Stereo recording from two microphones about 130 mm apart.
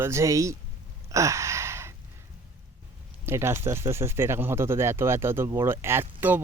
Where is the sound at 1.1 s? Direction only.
25° right (ahead or behind).